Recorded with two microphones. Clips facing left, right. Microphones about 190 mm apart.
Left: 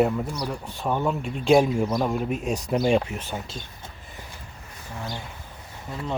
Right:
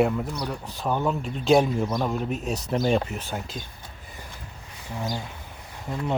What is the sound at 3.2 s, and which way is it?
Speech, 10° right (ahead or behind).